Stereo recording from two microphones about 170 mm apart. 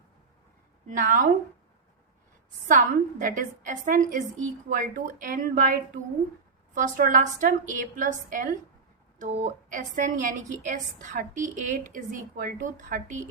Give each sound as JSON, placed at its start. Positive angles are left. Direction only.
{"t": 0.9, "sound": "a woman's voice", "side_deg": -50}
{"t": 2.6, "sound": "a woman's voice", "side_deg": -50}
{"t": 9.7, "sound": "a woman's voice", "side_deg": -50}